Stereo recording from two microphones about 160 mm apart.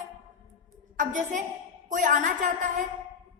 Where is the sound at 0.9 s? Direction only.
55° right (ahead or behind).